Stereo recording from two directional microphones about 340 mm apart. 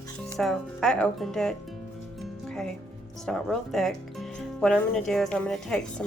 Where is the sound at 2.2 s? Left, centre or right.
Centre.